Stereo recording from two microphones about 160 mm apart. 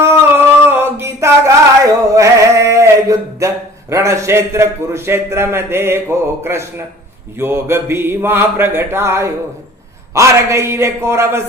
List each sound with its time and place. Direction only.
0.0 s a sound: 15° right (ahead or behind)
1.8 s male singing: 20° right (ahead or behind)
7.3 s speech: 15° right (ahead or behind)